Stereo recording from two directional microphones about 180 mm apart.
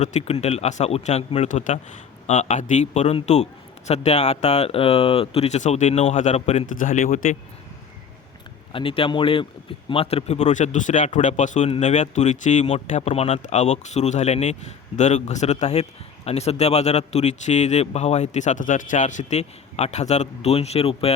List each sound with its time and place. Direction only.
0.0 s speech: 35° left (ahead or behind)
8.7 s speech: 30° left (ahead or behind)